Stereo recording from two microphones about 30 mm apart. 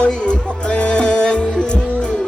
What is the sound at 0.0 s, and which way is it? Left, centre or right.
Music, left.